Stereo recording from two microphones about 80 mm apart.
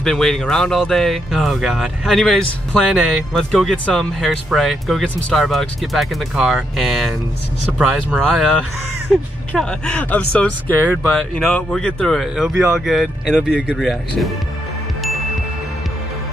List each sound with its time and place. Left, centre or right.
0.0 s speech: centre
3.7 s speech: centre
9.6 s speech: centre
11.0 s speech: centre
12.2 s speech: centre
13.7 s speech: centre